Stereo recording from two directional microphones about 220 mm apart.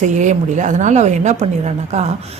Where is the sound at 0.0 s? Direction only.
35° right (ahead or behind).